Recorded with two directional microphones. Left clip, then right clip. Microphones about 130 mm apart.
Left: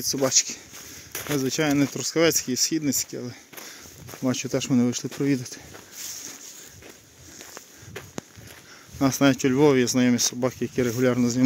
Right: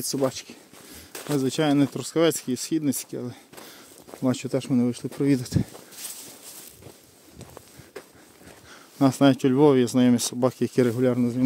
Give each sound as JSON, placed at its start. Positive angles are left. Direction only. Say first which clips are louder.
{"t": 0.2, "sound": "speech", "louder": "left 5 dB", "side_deg": -5}
{"t": 1.1, "sound": "a sound", "louder": "even", "side_deg": 0}
{"t": 1.4, "sound": "speech", "louder": "right 1 dB", "side_deg": -25}
{"t": 4.6, "sound": "speech", "louder": "left 1 dB", "side_deg": 0}
{"t": 5.2, "sound": "speech", "louder": "right 3 dB", "side_deg": -25}
{"t": 8.9, "sound": "speech", "louder": "right 1 dB", "side_deg": -25}
{"t": 10.6, "sound": "speech", "louder": "right 3 dB", "side_deg": -45}
{"t": 11.1, "sound": "speech", "louder": "left 2 dB", "side_deg": 0}